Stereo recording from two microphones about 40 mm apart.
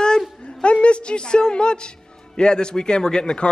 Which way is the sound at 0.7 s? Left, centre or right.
Left.